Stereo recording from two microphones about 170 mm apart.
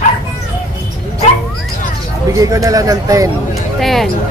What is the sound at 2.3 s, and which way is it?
Speech, 20° right (ahead or behind).